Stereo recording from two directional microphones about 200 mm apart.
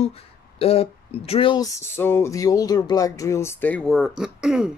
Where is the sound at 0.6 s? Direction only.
30° left (ahead or behind).